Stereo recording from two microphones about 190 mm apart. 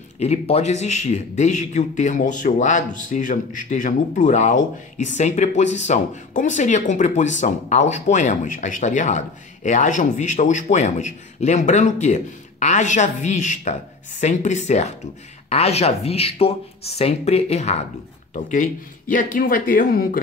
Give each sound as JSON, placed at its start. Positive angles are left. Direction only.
{"t": 0.2, "sound": "speech", "side_deg": 35}